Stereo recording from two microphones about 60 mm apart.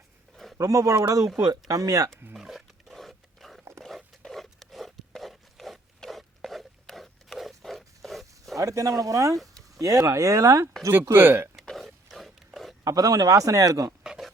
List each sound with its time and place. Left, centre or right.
0.6 s a man's voice: right
1.4 s speech: right
2.3 s wild animals: centre
3.6 s dog: right
4.3 s zipper: centre
8.5 s speech: right
11.1 s speech: right
11.5 s dog: centre
11.9 s pig: centre
12.8 s a man's voice: right
14.0 s a sound: centre